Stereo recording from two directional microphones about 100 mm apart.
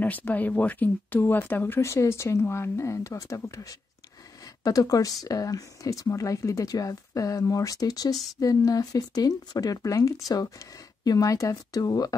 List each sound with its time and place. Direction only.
0.0 s speech: 15° left (ahead or behind); by 12.2 s 40° left (ahead or behind)